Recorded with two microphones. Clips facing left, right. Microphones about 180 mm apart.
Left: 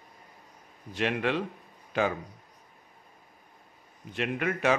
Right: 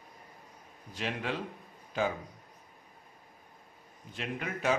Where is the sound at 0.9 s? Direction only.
70° left (ahead or behind).